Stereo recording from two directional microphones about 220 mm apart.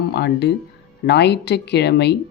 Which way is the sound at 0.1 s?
50° left (ahead or behind).